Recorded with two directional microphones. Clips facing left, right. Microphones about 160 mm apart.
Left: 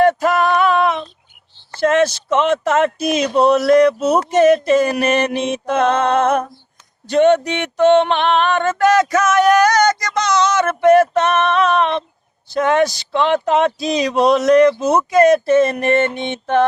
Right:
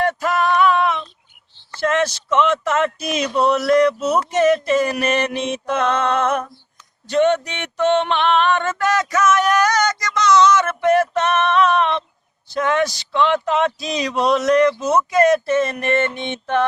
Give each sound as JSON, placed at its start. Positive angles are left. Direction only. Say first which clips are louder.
{"t": 0.0, "sound": "music", "louder": "left 5 dB", "side_deg": 35}
{"t": 1.7, "sound": "speech", "louder": "left 5 dB", "side_deg": 30}
{"t": 7.1, "sound": "music", "louder": "left 4 dB", "side_deg": 50}
{"t": 12.5, "sound": "speech", "louder": "left 4 dB", "side_deg": 30}